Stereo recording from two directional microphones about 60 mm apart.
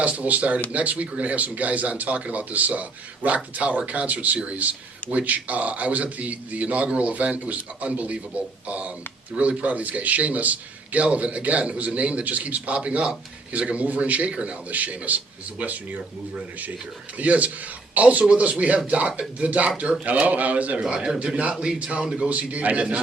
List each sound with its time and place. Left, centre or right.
0.0 s a man's voice: right
17.2 s a man's voice: right